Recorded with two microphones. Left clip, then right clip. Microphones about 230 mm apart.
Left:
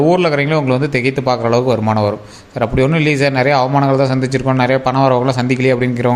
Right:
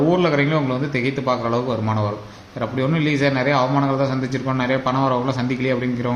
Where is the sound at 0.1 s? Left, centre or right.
Left.